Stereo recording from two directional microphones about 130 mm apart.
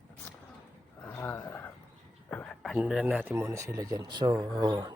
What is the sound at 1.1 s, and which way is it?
Speech, 20° left (ahead or behind).